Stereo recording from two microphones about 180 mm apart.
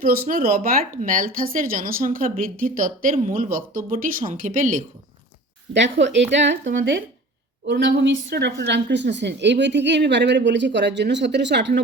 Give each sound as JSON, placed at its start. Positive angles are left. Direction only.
{"t": 0.0, "sound": "speech", "side_deg": -55}
{"t": 5.7, "sound": "a woman's voice", "side_deg": -80}